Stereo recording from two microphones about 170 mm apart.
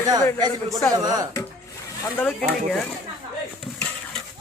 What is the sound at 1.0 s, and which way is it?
Speech, 25° right (ahead or behind).